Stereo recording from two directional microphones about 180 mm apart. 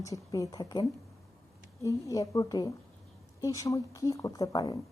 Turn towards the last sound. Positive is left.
turn(degrees=20)  # may be behind; listen again after turning